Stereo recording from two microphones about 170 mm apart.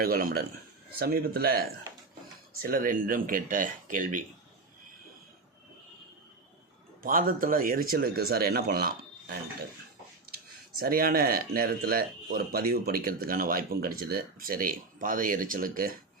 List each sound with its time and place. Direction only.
0.0 s speech: 60° right (ahead or behind)
7.0 s speech: 55° right (ahead or behind)